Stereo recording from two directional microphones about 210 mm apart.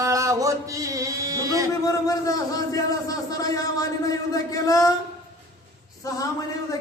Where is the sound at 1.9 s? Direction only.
15° left (ahead or behind).